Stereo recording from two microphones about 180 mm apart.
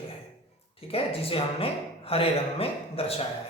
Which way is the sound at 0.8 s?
30° left (ahead or behind).